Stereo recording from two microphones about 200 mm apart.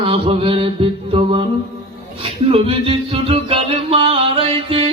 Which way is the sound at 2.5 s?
25° right (ahead or behind).